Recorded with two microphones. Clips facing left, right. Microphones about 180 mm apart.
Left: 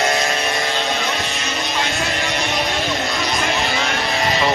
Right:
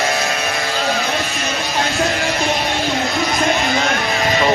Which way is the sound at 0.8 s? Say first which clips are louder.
Right 3 dB; centre (ahead or behind).